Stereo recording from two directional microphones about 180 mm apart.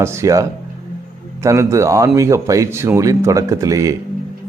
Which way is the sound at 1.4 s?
15° right (ahead or behind).